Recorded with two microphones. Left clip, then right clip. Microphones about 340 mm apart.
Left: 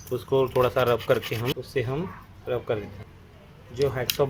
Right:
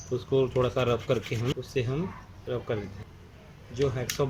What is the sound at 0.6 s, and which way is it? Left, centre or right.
Speech, left.